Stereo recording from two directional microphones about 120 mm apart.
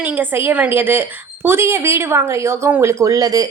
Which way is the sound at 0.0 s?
15° right (ahead or behind).